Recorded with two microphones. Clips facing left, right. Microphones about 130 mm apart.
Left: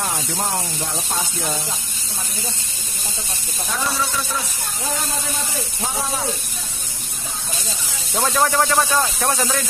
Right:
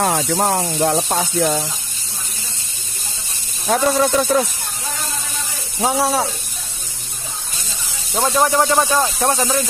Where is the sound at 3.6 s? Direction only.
50° right (ahead or behind).